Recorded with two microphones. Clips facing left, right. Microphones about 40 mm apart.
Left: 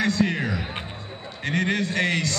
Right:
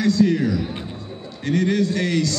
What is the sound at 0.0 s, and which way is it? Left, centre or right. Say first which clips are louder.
A man's voice: right 5 dB; left.